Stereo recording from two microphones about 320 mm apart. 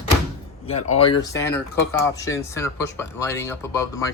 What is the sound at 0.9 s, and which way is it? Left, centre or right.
Speech, centre.